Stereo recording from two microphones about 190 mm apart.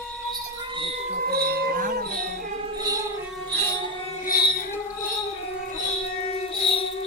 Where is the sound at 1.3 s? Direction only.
55° right (ahead or behind).